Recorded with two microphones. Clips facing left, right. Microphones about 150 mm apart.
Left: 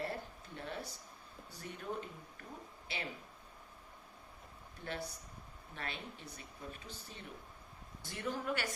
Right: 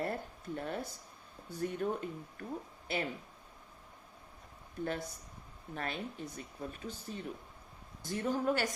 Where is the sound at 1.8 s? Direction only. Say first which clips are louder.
Right 7 dB; 45° right (ahead or behind).